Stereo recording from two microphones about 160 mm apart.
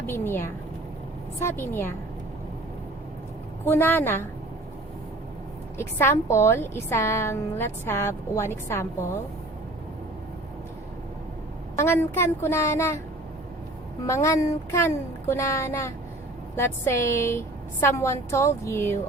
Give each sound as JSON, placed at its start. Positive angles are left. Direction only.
{"t": 0.0, "sound": "a woman's voice", "side_deg": 15}
{"t": 3.7, "sound": "a woman's voice", "side_deg": 15}
{"t": 5.7, "sound": "a woman's voice", "side_deg": 15}
{"t": 11.8, "sound": "a woman's voice", "side_deg": 15}
{"t": 14.1, "sound": "a woman's voice", "side_deg": 20}